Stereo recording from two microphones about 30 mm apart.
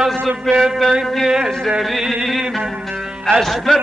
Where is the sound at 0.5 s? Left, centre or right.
Centre.